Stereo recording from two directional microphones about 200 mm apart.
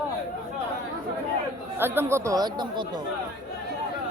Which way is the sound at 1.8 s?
10° right (ahead or behind).